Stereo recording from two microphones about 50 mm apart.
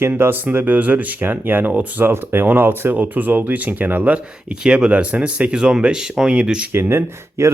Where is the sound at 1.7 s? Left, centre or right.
Right.